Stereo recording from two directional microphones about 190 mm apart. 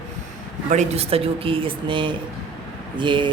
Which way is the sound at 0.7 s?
35° right (ahead or behind).